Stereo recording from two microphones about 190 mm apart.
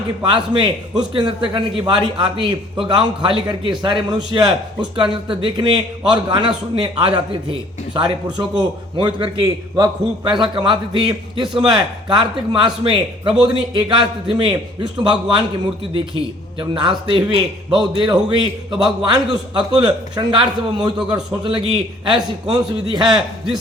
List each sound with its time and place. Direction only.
0.6 s a man's voice: 25° right (ahead or behind)
16.6 s a man's voice: 25° right (ahead or behind)
21.0 s a man's voice: 5° right (ahead or behind)
21.4 s a man's voice: 25° right (ahead or behind)